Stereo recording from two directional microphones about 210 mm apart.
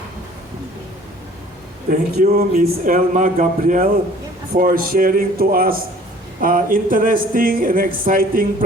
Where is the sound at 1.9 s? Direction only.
45° right (ahead or behind).